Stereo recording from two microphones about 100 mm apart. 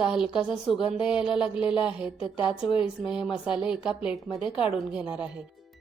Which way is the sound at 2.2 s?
60° left (ahead or behind).